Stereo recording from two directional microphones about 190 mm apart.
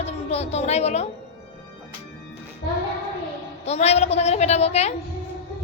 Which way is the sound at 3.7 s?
35° left (ahead or behind).